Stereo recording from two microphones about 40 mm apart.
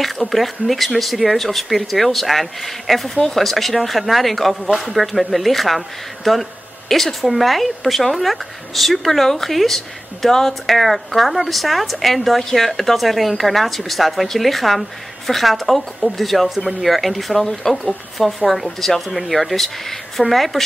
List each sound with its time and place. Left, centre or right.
0.0 s speech: centre